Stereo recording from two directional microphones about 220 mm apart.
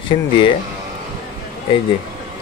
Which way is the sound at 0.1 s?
30° left (ahead or behind).